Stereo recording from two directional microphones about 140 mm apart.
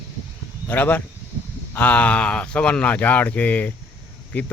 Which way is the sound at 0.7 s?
10° left (ahead or behind).